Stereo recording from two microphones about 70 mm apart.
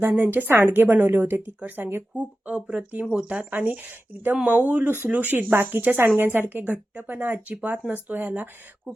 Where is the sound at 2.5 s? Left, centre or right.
Centre.